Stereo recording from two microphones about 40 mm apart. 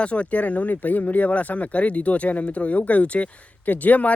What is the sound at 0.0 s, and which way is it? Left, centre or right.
Speech, left.